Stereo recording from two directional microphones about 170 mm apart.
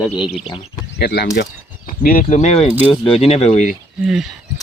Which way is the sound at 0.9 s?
65° left (ahead or behind).